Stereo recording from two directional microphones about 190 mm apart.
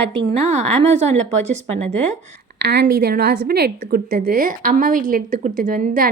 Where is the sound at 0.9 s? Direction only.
35° right (ahead or behind).